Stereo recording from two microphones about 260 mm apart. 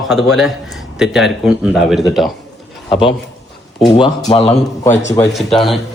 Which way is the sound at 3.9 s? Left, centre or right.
Left.